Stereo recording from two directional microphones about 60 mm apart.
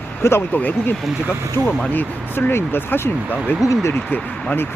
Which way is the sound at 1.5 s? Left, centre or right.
Left.